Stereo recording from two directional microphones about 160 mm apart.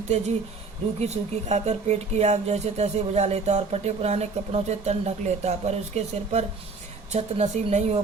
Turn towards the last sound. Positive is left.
turn(degrees=-45)  # may be behind; listen again after turning